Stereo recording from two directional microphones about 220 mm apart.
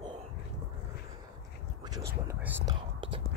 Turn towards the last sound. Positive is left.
turn(degrees=-20)  # may be behind; listen again after turning